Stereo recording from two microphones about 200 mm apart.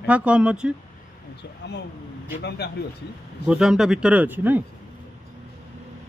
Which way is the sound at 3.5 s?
5° right (ahead or behind).